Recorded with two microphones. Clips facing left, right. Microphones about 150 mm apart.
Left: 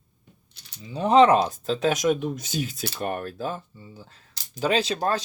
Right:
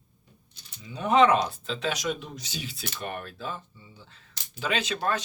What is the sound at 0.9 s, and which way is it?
Speech, 30° left (ahead or behind).